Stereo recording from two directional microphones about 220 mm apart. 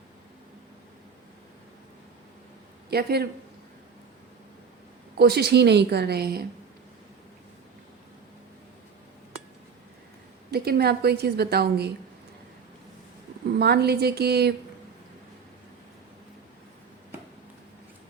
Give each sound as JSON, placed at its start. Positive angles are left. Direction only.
{"t": 2.9, "sound": "a woman's voice", "side_deg": -45}
{"t": 5.1, "sound": "a woman's voice", "side_deg": -45}
{"t": 10.5, "sound": "a woman's voice", "side_deg": -45}
{"t": 13.5, "sound": "a woman's voice", "side_deg": -45}